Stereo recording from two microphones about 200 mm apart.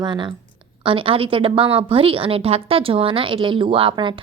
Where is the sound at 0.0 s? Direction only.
25° right (ahead or behind).